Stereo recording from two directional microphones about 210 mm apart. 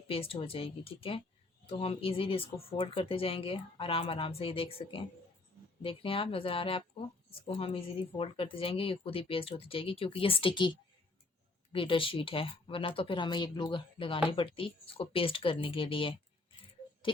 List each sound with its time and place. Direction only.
0.1 s speech: 25° left (ahead or behind)